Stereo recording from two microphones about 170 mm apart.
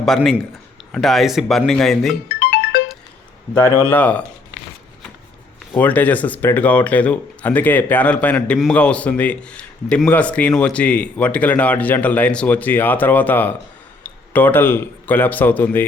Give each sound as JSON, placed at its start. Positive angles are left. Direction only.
{"t": 0.0, "sound": "speech", "side_deg": 0}
{"t": 2.4, "sound": "music", "side_deg": 65}
{"t": 3.8, "sound": "speech", "side_deg": 10}
{"t": 5.7, "sound": "a man's voice", "side_deg": 10}